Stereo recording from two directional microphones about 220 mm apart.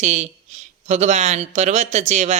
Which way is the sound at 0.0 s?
30° right (ahead or behind).